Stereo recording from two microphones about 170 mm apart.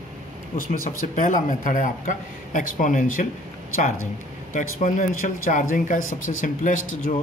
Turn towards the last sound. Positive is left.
turn(degrees=50)  # may be behind; listen again after turning